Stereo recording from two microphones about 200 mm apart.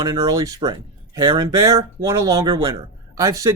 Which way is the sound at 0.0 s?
15° right (ahead or behind).